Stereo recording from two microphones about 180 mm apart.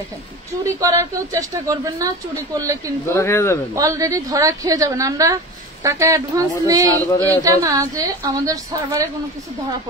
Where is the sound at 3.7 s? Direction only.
20° right (ahead or behind).